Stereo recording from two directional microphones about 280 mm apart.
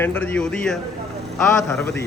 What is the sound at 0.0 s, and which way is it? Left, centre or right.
A man's voice, centre.